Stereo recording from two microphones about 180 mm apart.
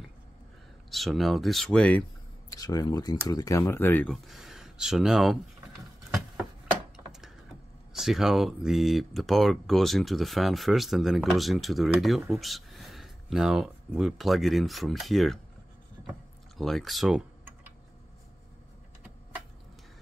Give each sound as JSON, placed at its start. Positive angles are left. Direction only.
{"t": 0.8, "sound": "speech", "side_deg": 0}
{"t": 2.5, "sound": "speech", "side_deg": 20}
{"t": 7.1, "sound": "a sound", "side_deg": 0}
{"t": 7.9, "sound": "speech", "side_deg": 0}
{"t": 16.5, "sound": "speech", "side_deg": 0}